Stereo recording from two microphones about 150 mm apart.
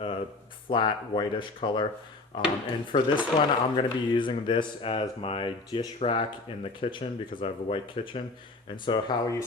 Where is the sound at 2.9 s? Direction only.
30° left (ahead or behind).